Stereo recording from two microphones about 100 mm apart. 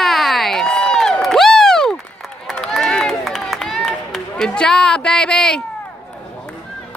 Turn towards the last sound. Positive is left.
turn(degrees=5)  # may be behind; listen again after turning